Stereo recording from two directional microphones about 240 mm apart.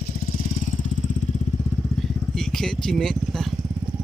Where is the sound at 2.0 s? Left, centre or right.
Centre.